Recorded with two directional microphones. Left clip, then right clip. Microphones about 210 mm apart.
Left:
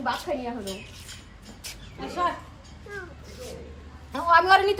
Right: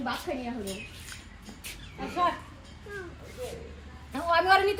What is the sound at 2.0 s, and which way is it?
Speech, centre (ahead or behind).